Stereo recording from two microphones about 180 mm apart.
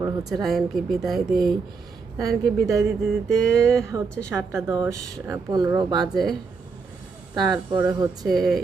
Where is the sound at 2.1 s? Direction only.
20° right (ahead or behind).